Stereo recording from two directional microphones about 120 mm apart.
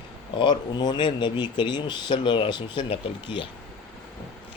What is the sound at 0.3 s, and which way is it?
Speech, 40° left (ahead or behind).